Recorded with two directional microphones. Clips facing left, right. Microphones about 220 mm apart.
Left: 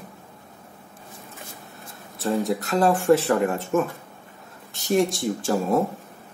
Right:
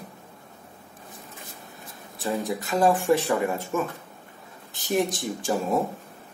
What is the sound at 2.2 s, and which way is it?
Speech, centre (ahead or behind).